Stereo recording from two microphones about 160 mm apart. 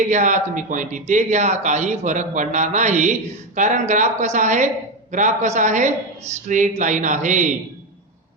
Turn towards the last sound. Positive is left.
turn(degrees=-50)  # may be behind; listen again after turning